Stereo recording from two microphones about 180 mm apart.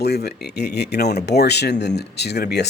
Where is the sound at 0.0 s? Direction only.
65° left (ahead or behind).